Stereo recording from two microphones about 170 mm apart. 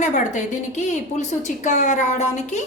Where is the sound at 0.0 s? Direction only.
45° left (ahead or behind).